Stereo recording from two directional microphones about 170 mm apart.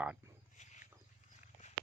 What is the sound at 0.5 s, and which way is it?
Wild animals, 45° left (ahead or behind).